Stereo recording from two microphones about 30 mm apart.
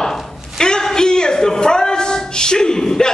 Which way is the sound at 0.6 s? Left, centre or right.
Left.